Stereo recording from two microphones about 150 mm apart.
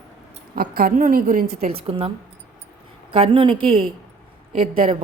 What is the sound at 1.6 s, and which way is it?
Speech, 35° right (ahead or behind).